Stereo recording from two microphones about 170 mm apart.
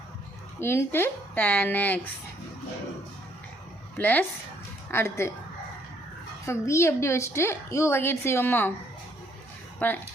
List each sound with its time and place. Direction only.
0.6 s a woman's voice: 15° left (ahead or behind)
3.9 s a woman's voice: 10° left (ahead or behind)
6.4 s a woman's voice: 15° left (ahead or behind)
9.8 s a woman's voice: 10° left (ahead or behind)